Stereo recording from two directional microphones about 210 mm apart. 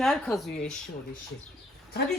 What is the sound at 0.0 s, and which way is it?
Speech, centre (ahead or behind).